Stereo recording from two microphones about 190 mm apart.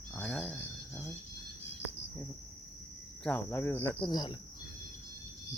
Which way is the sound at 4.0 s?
20° left (ahead or behind).